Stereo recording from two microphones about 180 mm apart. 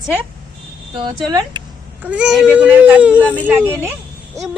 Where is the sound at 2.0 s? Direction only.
5° right (ahead or behind).